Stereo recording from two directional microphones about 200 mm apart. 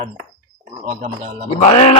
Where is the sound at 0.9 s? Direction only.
30° right (ahead or behind).